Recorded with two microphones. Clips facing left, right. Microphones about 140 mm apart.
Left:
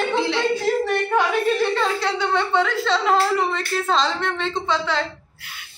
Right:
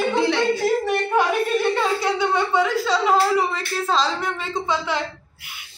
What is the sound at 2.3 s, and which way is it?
Speech, 10° right (ahead or behind).